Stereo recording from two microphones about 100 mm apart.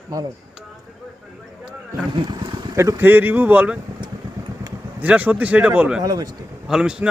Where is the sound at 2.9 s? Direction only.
20° right (ahead or behind).